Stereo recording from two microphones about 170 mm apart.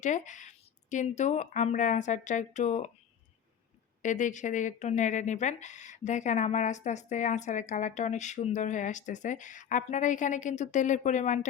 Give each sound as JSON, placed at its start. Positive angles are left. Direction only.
{"t": 0.0, "sound": "speech", "side_deg": 45}
{"t": 4.0, "sound": "speech", "side_deg": 45}